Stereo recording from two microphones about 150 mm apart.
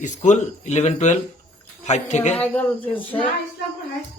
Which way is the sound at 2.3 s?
10° left (ahead or behind).